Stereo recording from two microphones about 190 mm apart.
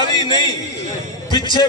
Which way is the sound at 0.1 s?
20° left (ahead or behind).